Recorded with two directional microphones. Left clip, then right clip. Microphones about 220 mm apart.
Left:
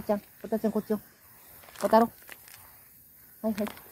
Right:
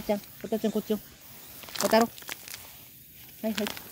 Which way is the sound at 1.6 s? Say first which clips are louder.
Left 1 dB; 45° right (ahead or behind).